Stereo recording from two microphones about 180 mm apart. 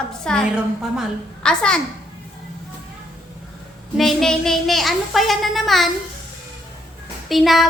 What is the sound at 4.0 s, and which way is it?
A woman's voice, centre (ahead or behind).